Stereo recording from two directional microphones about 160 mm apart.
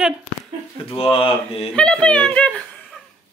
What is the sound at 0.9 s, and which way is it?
Speech, 35° left (ahead or behind).